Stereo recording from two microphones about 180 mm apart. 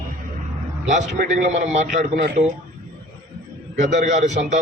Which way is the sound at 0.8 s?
45° right (ahead or behind).